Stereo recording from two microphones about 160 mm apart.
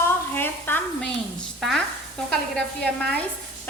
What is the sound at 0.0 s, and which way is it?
Sizzle, 10° left (ahead or behind).